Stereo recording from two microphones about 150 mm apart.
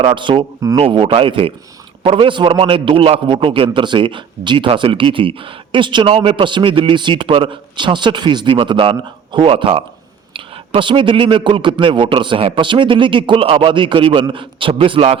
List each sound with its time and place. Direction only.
0.0 s a man's voice: 30° right (ahead or behind)